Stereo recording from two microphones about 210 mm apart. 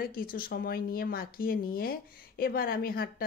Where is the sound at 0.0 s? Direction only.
45° left (ahead or behind).